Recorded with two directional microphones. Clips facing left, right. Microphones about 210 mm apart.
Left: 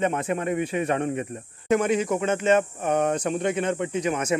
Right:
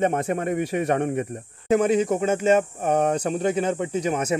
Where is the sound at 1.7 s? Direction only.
35° right (ahead or behind).